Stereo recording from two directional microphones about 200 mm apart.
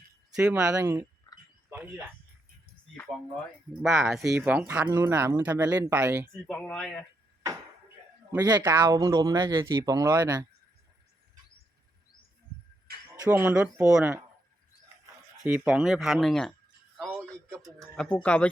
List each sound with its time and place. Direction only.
0.3 s speech: 5° right (ahead or behind)
1.3 s a sound: 20° left (ahead or behind)
1.7 s speech: 10° right (ahead or behind)
3.8 s speech: centre (ahead or behind)
6.5 s speech: 5° left (ahead or behind)
8.3 s speech: 20° right (ahead or behind)
13.1 s speech: 15° right (ahead or behind)
15.4 s speech: 5° right (ahead or behind)
17.6 s speech: centre (ahead or behind)